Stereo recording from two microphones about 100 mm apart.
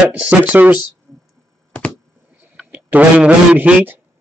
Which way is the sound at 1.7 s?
15° left (ahead or behind).